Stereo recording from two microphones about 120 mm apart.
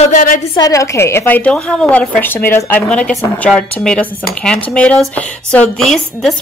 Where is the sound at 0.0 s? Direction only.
90° left.